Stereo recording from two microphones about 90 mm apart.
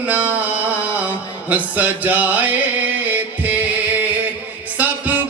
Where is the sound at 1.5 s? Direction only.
15° right (ahead or behind).